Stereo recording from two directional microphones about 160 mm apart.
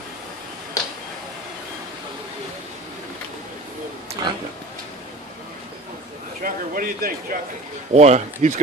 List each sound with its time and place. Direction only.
4.2 s speech: 25° right (ahead or behind)
6.4 s speech: 65° right (ahead or behind)
7.9 s speech: 45° right (ahead or behind)